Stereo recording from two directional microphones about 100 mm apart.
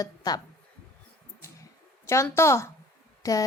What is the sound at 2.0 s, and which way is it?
A woman's voice, 30° left (ahead or behind).